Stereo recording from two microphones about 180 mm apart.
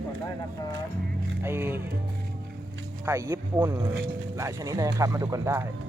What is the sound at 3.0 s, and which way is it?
Speech, 15° right (ahead or behind).